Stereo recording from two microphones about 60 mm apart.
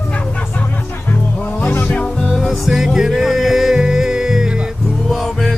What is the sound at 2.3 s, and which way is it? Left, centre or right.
Music, centre.